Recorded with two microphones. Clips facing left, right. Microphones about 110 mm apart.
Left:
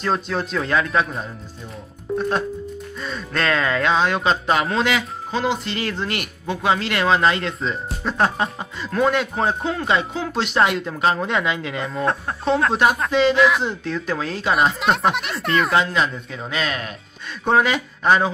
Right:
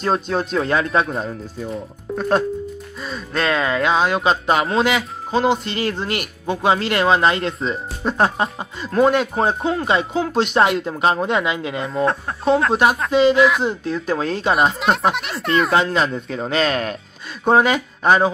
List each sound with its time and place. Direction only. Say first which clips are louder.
0.0 s speech: right 3 dB; 30° right (ahead or behind)
2.1 s speech: right 3 dB; centre (ahead or behind)
3.3 s speech: right 1 dB; 25° right (ahead or behind)
8.0 s speech: right 2 dB; 20° right (ahead or behind)
11.8 s speech: right 3 dB; centre (ahead or behind)
13.1 s speech: right 4 dB; 15° right (ahead or behind)
13.9 s speech: right 3 dB; 25° right (ahead or behind)
14.8 s speech: right 1 dB; centre (ahead or behind)
15.7 s speech: right 2 dB; 30° right (ahead or behind)
17.5 s speech: right 3 dB; 25° right (ahead or behind)